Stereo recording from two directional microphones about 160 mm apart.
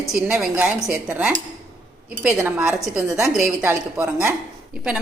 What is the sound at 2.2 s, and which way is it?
A woman's voice, 10° right (ahead or behind).